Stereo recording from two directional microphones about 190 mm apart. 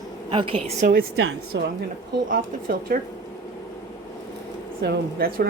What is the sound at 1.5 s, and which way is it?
Speech, 65° right (ahead or behind).